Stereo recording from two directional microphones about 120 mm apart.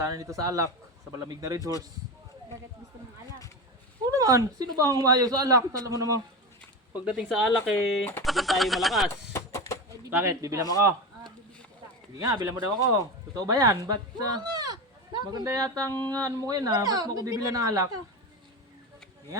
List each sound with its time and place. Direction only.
0.0 s speech: 30° right (ahead or behind)
4.0 s speech: 30° right (ahead or behind)
7.0 s speech: 5° right (ahead or behind)
9.3 s a sound: 25° left (ahead or behind)
10.1 s speech: 15° right (ahead or behind)
10.4 s speech: 25° right (ahead or behind)
12.2 s speech: 30° right (ahead or behind)